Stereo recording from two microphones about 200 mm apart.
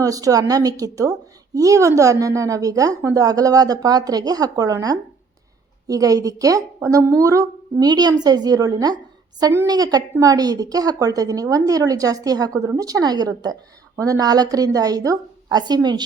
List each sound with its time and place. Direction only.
0.0 s a woman's voice: 15° right (ahead or behind)